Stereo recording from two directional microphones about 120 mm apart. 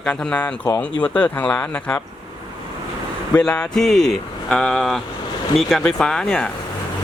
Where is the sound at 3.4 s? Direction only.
10° left (ahead or behind).